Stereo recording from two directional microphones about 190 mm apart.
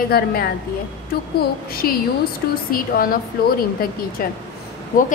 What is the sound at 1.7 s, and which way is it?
A woman's voice, 50° left (ahead or behind).